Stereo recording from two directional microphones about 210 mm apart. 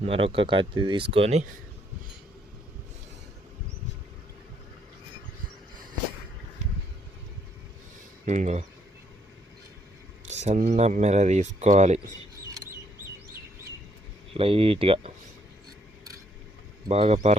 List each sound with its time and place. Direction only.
0.0 s speech: 25° right (ahead or behind)
8.2 s speech: 35° right (ahead or behind)
10.2 s speech: 35° right (ahead or behind)
14.3 s speech: 25° right (ahead or behind)
16.9 s speech: 30° right (ahead or behind)